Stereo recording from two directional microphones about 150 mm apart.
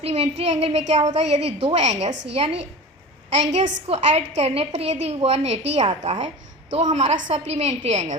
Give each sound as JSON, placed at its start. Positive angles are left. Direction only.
{"t": 0.0, "sound": "a woman's voice", "side_deg": -45}